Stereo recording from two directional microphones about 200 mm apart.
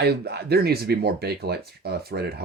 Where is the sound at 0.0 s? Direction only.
55° right (ahead or behind).